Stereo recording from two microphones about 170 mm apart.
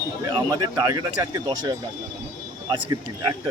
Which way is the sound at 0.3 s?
25° right (ahead or behind).